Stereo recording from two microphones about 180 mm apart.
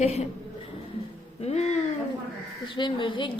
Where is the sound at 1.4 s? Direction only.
35° left (ahead or behind).